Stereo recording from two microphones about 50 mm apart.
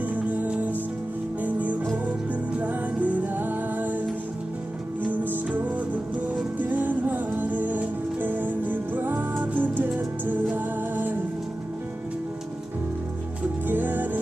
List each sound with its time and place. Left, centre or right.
0.0 s music: right
5.0 s music: right
13.7 s music: right